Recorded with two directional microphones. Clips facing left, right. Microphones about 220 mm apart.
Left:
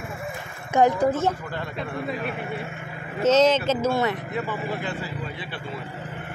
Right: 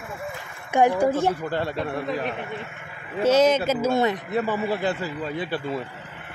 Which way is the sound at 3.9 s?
25° right (ahead or behind).